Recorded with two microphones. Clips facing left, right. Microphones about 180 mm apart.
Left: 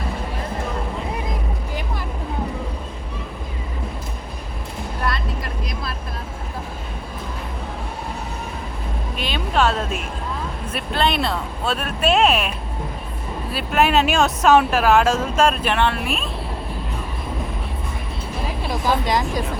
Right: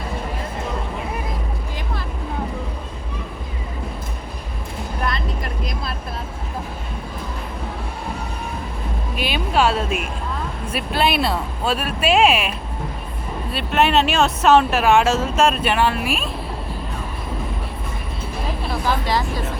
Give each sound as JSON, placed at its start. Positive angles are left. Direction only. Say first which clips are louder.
{"t": 9.1, "sound": "a sound", "louder": "right 2 dB", "side_deg": -10}
{"t": 10.7, "sound": "speech", "louder": "right 1 dB", "side_deg": -10}
{"t": 18.7, "sound": "speech", "louder": "left 1 dB", "side_deg": 15}